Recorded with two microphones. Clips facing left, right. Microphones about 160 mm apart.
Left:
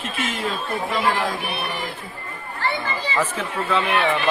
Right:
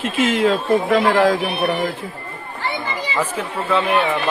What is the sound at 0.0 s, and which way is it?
Speech, 90° right.